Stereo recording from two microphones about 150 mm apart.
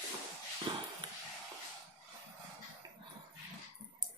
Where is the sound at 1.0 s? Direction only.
30° right (ahead or behind).